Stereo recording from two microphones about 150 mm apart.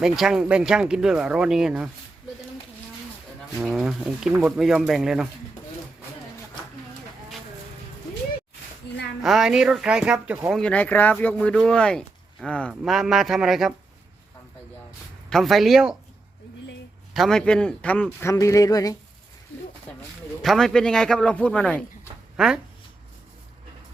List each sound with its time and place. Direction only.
0.0 s speech: 5° right (ahead or behind)
3.5 s speech: 5° right (ahead or behind)
9.2 s speech: 5° right (ahead or behind)
10.5 s speech: 5° left (ahead or behind)
15.3 s speech: centre (ahead or behind)
17.2 s speech: 5° left (ahead or behind)
18.3 s speech: 20° left (ahead or behind)
19.9 s speech: 10° left (ahead or behind)